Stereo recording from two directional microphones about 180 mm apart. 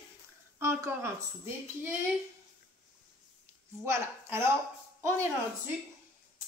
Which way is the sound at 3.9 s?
15° right (ahead or behind).